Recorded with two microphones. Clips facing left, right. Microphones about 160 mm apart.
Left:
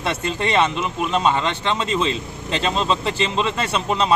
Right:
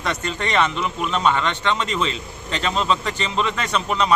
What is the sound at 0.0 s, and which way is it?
Speech, 30° left (ahead or behind).